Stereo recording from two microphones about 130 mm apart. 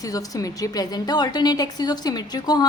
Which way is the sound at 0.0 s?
25° left (ahead or behind).